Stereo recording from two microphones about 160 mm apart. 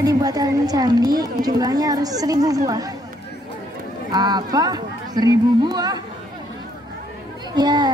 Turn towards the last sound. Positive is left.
turn(degrees=-25)  # may be behind; listen again after turning